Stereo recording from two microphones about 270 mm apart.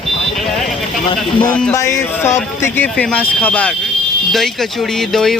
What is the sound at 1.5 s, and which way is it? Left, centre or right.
Speech, centre.